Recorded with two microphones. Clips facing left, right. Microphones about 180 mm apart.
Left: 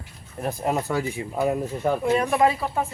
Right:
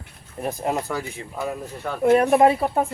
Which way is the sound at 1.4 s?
20° left (ahead or behind).